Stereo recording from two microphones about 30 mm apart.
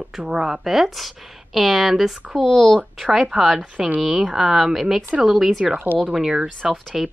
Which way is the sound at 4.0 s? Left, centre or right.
Centre.